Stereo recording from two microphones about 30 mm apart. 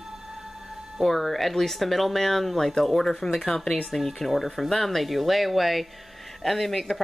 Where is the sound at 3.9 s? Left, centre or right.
Centre.